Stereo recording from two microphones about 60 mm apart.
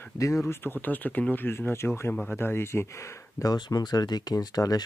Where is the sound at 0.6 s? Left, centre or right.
Left.